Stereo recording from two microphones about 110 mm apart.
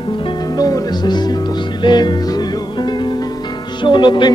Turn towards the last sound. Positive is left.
turn(degrees=45)  # may be behind; listen again after turning